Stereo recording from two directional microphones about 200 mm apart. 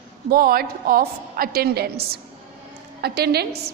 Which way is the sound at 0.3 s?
50° right (ahead or behind).